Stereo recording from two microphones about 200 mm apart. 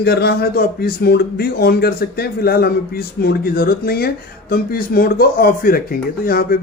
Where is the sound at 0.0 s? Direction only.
55° left (ahead or behind).